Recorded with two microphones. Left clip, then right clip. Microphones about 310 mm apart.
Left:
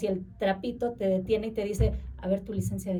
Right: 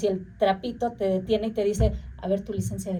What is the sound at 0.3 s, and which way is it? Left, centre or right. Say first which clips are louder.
A woman's voice: right 6 dB; centre.